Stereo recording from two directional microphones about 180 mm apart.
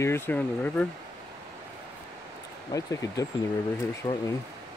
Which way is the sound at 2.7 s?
20° left (ahead or behind).